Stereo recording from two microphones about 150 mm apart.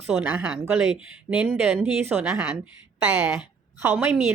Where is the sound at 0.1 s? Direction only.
10° right (ahead or behind).